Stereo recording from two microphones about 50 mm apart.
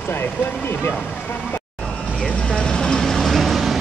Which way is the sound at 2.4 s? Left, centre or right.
Centre.